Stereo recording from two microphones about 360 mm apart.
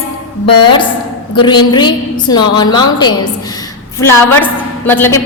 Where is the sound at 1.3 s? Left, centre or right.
Centre.